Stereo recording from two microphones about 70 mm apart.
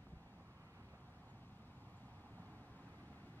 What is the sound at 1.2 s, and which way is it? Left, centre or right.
Vehicle, left.